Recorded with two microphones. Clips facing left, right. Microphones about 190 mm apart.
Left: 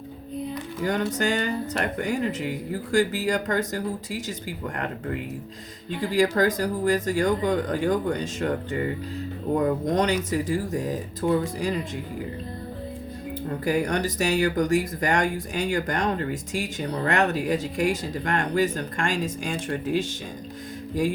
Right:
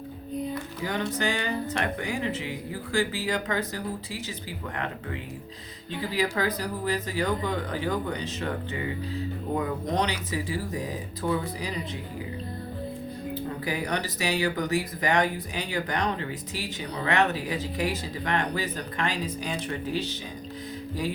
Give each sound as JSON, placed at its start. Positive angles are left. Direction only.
{"t": 0.8, "sound": "speech", "side_deg": 45}
{"t": 6.0, "sound": "speech", "side_deg": 45}
{"t": 13.7, "sound": "speech", "side_deg": 45}